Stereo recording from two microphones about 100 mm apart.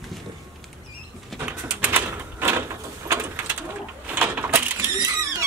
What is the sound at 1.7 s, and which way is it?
Bird, 20° right (ahead or behind).